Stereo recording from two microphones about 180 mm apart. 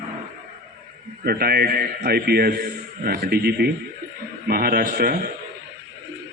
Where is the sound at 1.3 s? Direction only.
60° right (ahead or behind).